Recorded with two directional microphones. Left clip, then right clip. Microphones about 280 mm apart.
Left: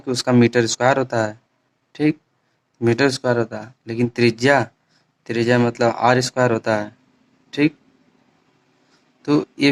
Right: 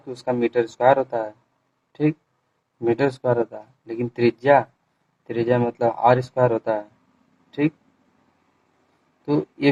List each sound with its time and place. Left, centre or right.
0.0 s speech: left
9.2 s speech: left